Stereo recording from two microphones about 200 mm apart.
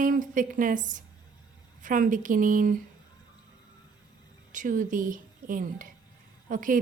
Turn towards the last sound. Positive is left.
turn(degrees=-40)  # may be behind; listen again after turning